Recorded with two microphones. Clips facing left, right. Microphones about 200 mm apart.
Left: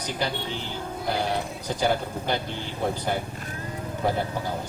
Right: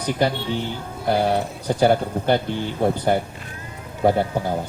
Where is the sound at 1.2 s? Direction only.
55° right (ahead or behind).